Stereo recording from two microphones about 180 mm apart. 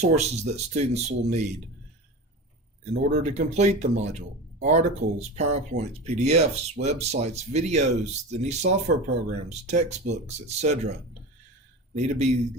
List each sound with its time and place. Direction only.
0.0 s speech: 40° right (ahead or behind)
2.9 s speech: 35° right (ahead or behind)
11.9 s speech: 40° right (ahead or behind)